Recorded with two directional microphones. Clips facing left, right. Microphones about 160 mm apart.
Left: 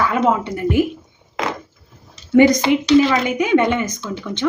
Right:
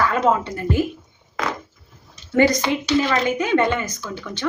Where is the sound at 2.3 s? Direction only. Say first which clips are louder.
Left 5 dB; 20° left (ahead or behind).